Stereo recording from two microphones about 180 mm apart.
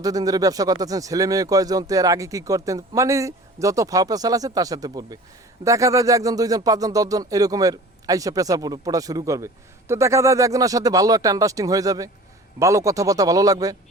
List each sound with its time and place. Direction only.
0.0 s speech: 20° right (ahead or behind)